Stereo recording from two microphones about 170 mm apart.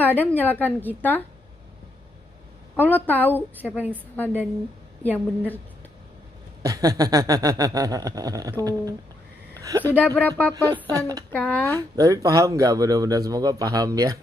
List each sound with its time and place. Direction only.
0.0 s a woman's voice: 10° left (ahead or behind)
2.7 s a woman's voice: 10° left (ahead or behind)
5.1 s a woman's voice: 10° left (ahead or behind)
6.6 s a sound: 20° right (ahead or behind)
9.6 s speech: 20° right (ahead or behind)
9.8 s a woman's voice: 10° left (ahead or behind)
10.5 s a sound: 20° right (ahead or behind)
11.3 s a woman's voice: 10° left (ahead or behind)
12.0 s a sound: 20° right (ahead or behind)